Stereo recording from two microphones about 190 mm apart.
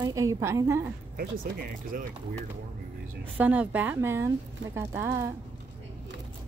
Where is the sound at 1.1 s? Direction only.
50° right (ahead or behind).